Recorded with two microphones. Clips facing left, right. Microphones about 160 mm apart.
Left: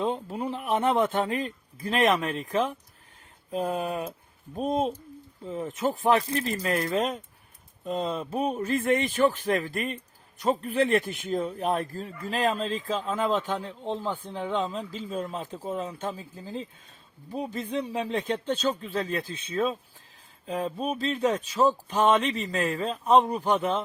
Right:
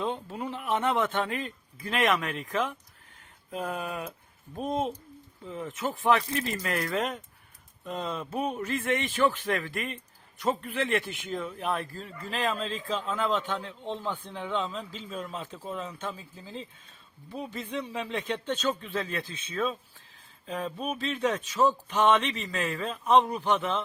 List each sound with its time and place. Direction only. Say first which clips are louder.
0.3 s speech: left 3 dB; 35° left (ahead or behind)
5.5 s speech: left 5 dB; 35° left (ahead or behind)
13.9 s speech: left 3 dB; 10° left (ahead or behind)
14.3 s speech: left 4 dB; 40° left (ahead or behind)